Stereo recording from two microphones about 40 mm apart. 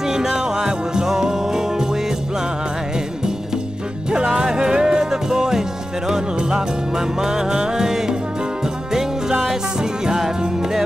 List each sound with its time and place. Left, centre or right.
0.0 s music: centre
4.1 s music: right
9.8 s music: centre